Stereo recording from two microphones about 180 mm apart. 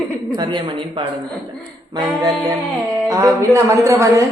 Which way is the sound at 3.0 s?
15° right (ahead or behind).